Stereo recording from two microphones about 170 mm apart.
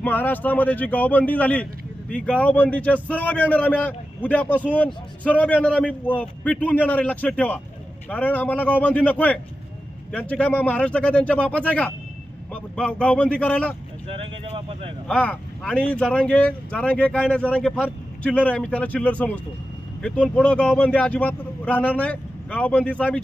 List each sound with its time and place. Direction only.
0.0 s speech: 10° left (ahead or behind)
14.2 s vehicle: 35° right (ahead or behind)
15.0 s speech: 5° left (ahead or behind)